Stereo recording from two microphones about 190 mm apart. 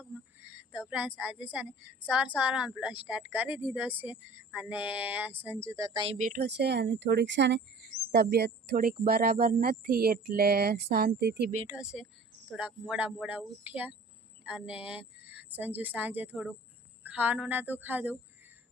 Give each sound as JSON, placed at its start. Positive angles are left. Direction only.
{"t": 0.0, "sound": "a sound", "side_deg": -10}
{"t": 2.0, "sound": "a woman's voice", "side_deg": -5}
{"t": 6.1, "sound": "speech", "side_deg": -45}
{"t": 6.4, "sound": "speech", "side_deg": -60}
{"t": 11.7, "sound": "a woman's voice", "side_deg": -5}